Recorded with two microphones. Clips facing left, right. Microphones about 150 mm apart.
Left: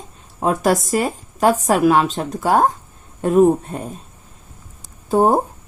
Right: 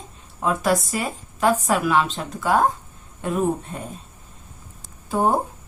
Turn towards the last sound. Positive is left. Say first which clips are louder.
# left 6 dB
turn(degrees=40)  # may be behind; listen again after turning